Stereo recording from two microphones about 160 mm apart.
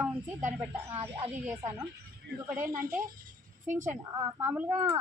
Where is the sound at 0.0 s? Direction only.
10° right (ahead or behind).